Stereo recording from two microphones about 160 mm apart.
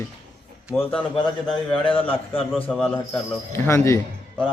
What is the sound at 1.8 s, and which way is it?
Speech, 35° left (ahead or behind).